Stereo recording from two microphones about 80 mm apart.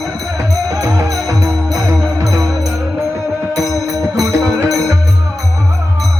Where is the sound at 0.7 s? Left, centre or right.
Right.